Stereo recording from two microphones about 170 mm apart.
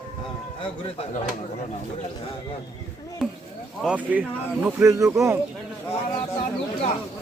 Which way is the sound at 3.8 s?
5° right (ahead or behind).